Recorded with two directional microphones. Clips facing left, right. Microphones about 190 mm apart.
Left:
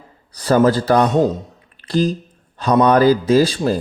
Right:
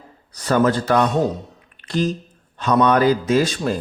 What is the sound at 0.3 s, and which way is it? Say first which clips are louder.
Speech: left 4 dB; 35° left (ahead or behind).